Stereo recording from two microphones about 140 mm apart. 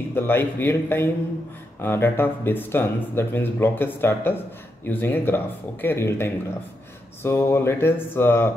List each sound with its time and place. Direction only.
0.1 s speech: 15° left (ahead or behind)